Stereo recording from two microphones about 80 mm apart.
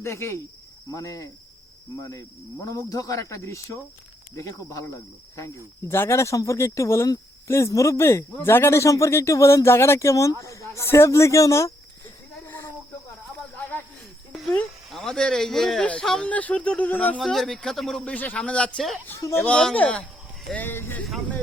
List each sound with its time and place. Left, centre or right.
0.0 s speech: left
0.9 s cricket: left
2.0 s speech: left
12.5 s cricket: left
13.6 s snake: left
14.8 s speech: centre
16.3 s speech: centre
17.2 s speech: centre
18.0 s speech: centre